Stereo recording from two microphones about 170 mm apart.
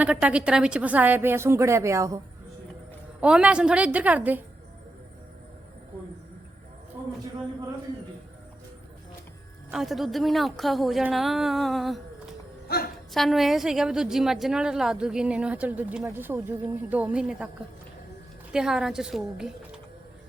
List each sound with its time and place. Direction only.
0.0 s a woman's voice: 5° right (ahead or behind)
3.2 s a woman's voice: 5° right (ahead or behind)
7.0 s a sound: 15° right (ahead or behind)
9.7 s a woman's voice: centre (ahead or behind)
12.6 s speech: 65° left (ahead or behind)
13.1 s a woman's voice: centre (ahead or behind)
18.5 s a woman's voice: 5° right (ahead or behind)